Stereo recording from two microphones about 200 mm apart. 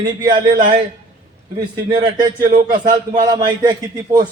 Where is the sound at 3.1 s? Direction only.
20° right (ahead or behind).